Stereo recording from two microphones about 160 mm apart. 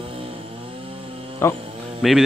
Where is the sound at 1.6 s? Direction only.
35° right (ahead or behind).